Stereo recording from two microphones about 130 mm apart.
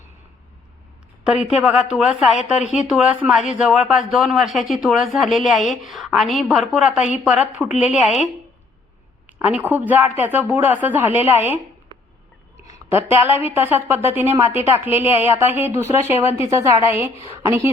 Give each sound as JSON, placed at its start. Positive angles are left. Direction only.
{"t": 1.2, "sound": "a woman's voice", "side_deg": -5}
{"t": 9.2, "sound": "a woman's voice", "side_deg": -10}
{"t": 12.9, "sound": "a woman's voice", "side_deg": -15}